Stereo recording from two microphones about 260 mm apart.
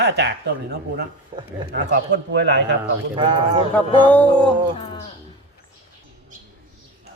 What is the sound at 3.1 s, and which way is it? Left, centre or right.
Speech, centre.